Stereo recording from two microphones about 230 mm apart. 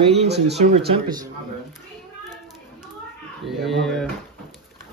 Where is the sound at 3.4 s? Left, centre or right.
Centre.